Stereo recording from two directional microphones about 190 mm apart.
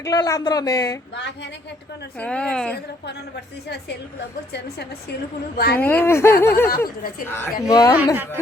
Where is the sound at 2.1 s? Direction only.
5° left (ahead or behind).